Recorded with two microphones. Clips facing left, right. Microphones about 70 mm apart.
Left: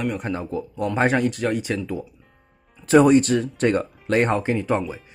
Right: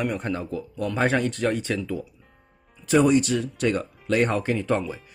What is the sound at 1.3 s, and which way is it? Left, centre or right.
Speech, centre.